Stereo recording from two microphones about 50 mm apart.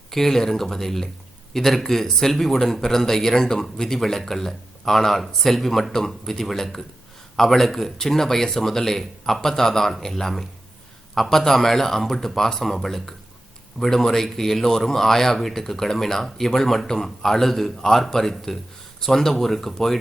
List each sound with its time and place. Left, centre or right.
0.1 s a man's voice: centre